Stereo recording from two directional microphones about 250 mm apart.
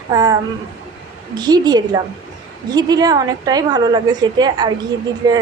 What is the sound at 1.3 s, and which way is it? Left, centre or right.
A woman's voice, centre.